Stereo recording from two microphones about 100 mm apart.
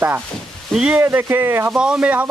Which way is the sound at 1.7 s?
10° right (ahead or behind).